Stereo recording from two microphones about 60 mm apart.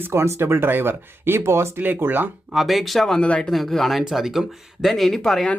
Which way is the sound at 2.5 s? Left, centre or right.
Centre.